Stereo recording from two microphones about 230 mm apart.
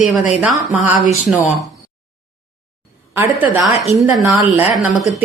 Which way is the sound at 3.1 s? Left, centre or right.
Centre.